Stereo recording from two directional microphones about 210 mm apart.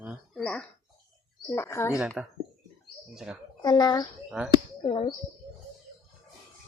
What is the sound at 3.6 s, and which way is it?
Speech, 20° left (ahead or behind).